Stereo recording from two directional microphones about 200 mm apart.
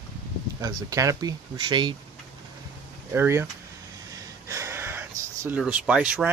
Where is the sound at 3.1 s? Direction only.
10° right (ahead or behind).